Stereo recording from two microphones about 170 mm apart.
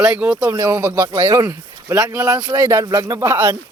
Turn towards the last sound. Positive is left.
turn(degrees=-15)  # may be behind; listen again after turning